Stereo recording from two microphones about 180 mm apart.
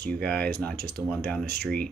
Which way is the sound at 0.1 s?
5° left (ahead or behind).